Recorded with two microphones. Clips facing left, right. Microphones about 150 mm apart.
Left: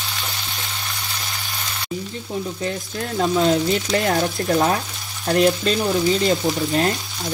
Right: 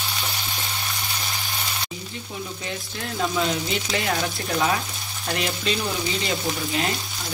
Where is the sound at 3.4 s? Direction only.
45° left (ahead or behind).